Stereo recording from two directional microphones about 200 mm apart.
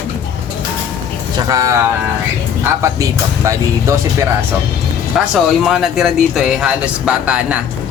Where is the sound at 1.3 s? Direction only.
15° right (ahead or behind).